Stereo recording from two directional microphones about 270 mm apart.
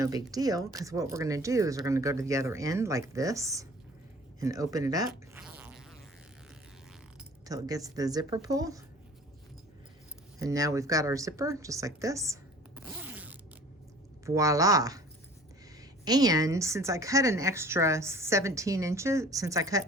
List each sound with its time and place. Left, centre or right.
0.0 s a woman's voice: centre
4.4 s zipper: centre
7.4 s a woman's voice: centre
10.4 s a woman's voice: centre